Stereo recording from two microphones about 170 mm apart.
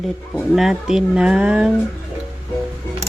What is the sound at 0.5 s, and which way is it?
Speech, 5° right (ahead or behind).